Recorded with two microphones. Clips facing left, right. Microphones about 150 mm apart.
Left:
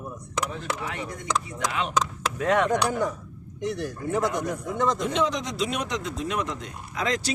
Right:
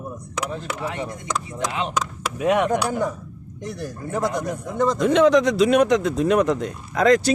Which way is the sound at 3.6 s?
35° right (ahead or behind).